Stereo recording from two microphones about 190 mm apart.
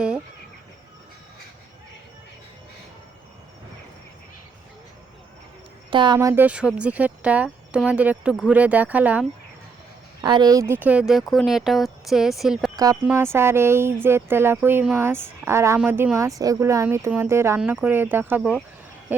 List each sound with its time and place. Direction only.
5.9 s speech: 25° right (ahead or behind)
6.1 s speech: 10° right (ahead or behind)
10.2 s speech: 20° right (ahead or behind); by 12.7 s centre (ahead or behind)
12.7 s speech: 20° right (ahead or behind)